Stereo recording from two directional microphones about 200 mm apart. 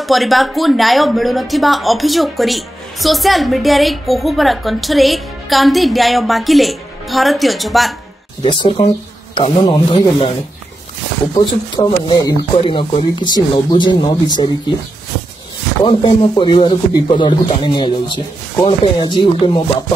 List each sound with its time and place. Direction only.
0.0 s a woman's voice: centre (ahead or behind)
8.5 s speech: 25° left (ahead or behind)
11.3 s speech: 20° left (ahead or behind)
15.8 s speech: 25° left (ahead or behind)